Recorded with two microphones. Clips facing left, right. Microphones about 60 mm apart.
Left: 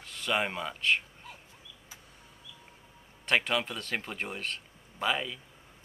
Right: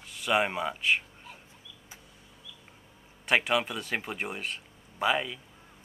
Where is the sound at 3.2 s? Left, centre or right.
Centre.